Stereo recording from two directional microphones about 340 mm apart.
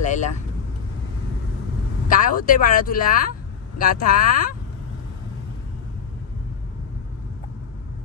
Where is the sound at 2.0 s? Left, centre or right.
Left.